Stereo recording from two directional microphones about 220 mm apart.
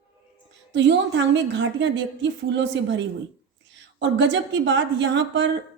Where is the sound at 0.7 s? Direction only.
55° right (ahead or behind).